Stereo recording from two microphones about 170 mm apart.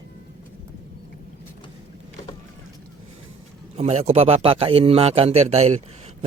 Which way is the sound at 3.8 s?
40° right (ahead or behind).